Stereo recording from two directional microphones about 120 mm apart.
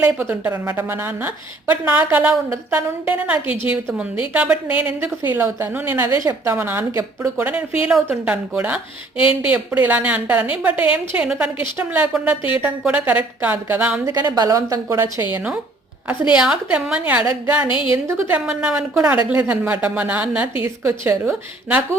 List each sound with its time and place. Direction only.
0.0 s a woman's voice: 15° right (ahead or behind)
6.1 s a woman's voice: 25° right (ahead or behind)
14.0 s a woman's voice: 30° right (ahead or behind); by 17.2 s 10° right (ahead or behind)
17.7 s a woman's voice: 45° left (ahead or behind)
17.9 s a woman's voice: 20° right (ahead or behind)
18.3 s a woman's voice: 10° right (ahead or behind)